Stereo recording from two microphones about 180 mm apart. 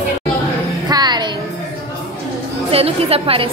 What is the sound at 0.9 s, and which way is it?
Music, 25° right (ahead or behind).